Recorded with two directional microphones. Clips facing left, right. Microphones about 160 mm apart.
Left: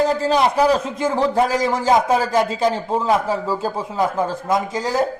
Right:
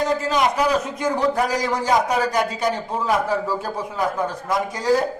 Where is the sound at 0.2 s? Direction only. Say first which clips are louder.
Left 4 dB; 30° left (ahead or behind).